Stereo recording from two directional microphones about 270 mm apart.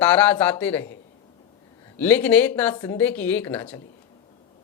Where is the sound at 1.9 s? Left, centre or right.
Centre.